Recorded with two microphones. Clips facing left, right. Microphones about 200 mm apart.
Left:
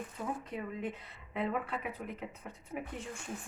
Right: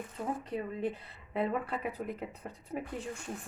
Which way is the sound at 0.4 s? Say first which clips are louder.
Right 4 dB; 30° right (ahead or behind).